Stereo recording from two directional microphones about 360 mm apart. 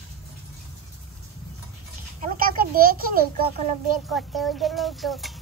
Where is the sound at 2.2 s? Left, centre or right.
Right.